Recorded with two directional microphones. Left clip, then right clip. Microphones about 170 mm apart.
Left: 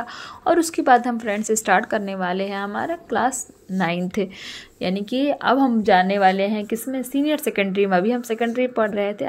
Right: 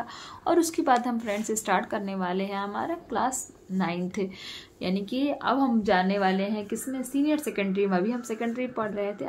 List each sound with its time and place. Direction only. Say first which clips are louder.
0.5 s a woman's voice: left 7 dB; 40° left (ahead or behind)